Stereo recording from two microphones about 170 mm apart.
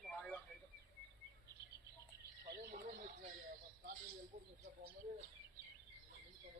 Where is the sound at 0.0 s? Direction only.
5° left (ahead or behind).